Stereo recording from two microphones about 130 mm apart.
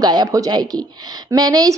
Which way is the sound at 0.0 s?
30° right (ahead or behind).